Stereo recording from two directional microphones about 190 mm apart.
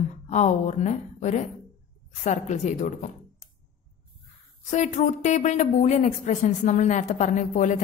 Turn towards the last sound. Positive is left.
turn(degrees=40)  # may be behind; listen again after turning